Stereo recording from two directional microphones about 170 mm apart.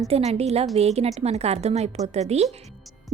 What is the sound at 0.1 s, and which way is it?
A woman's voice, 40° right (ahead or behind).